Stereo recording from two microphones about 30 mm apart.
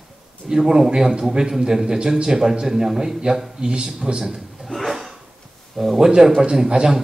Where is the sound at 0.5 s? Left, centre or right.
Centre.